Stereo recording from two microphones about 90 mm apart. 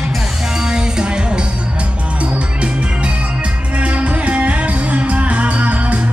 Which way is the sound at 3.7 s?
15° right (ahead or behind).